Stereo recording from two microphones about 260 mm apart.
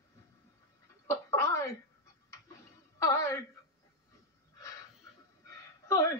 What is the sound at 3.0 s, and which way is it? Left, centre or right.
Music, centre.